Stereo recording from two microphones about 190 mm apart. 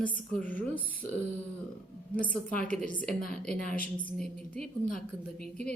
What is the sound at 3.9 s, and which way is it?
Speech, 5° left (ahead or behind).